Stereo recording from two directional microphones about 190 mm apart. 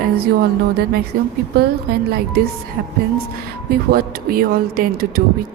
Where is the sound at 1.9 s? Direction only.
55° right (ahead or behind).